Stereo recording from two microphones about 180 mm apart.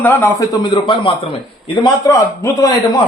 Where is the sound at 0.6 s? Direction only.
30° left (ahead or behind).